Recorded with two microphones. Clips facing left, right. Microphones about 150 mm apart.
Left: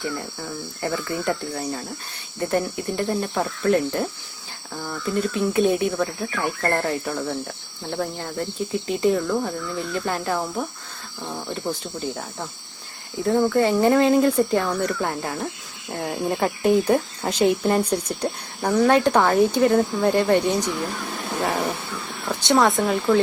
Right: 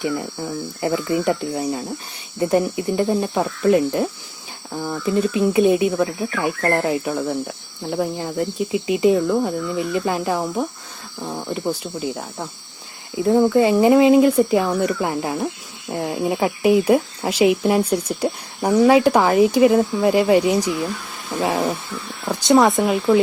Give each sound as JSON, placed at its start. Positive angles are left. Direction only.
{"t": 0.0, "sound": "speech", "side_deg": -15}
{"t": 22.8, "sound": "speech", "side_deg": -10}